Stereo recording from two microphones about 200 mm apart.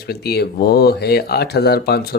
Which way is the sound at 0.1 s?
55° left (ahead or behind).